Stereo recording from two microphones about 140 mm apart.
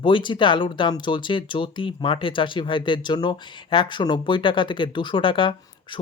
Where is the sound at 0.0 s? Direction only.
35° left (ahead or behind).